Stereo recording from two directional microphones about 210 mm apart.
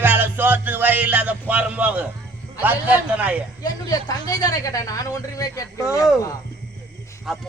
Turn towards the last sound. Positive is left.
turn(degrees=0)  # may be behind; listen again after turning